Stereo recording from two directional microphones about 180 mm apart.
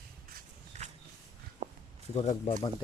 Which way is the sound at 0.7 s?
40° right (ahead or behind).